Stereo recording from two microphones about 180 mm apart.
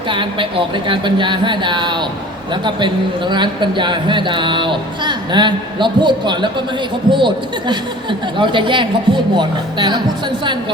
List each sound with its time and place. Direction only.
0.1 s speech: 30° right (ahead or behind)